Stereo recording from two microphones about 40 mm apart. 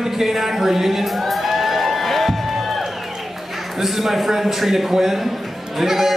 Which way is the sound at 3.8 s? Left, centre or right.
Centre.